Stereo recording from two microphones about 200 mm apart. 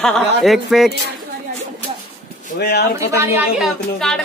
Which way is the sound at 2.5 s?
50° left (ahead or behind).